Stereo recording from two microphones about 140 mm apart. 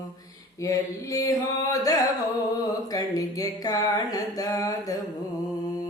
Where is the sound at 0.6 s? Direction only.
25° left (ahead or behind).